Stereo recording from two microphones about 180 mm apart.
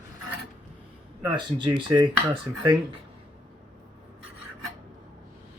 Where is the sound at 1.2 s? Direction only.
25° right (ahead or behind).